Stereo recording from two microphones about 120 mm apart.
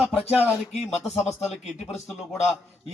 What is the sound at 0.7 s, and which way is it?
Speech, 65° left (ahead or behind).